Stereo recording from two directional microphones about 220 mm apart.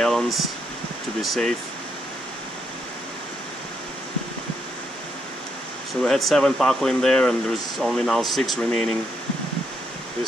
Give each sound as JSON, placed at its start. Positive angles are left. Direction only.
{"t": 0.0, "sound": "a sound", "side_deg": 0}
{"t": 1.2, "sound": "speech", "side_deg": 0}
{"t": 6.0, "sound": "speech", "side_deg": 0}